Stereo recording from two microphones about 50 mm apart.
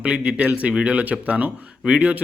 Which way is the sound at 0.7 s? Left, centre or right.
Right.